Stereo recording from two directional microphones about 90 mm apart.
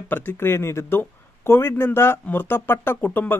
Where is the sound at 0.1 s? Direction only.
25° left (ahead or behind).